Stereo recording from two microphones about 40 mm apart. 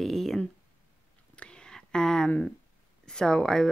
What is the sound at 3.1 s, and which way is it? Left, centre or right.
Speech, centre.